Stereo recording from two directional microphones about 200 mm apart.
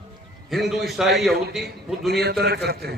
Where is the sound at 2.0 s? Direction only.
55° right (ahead or behind).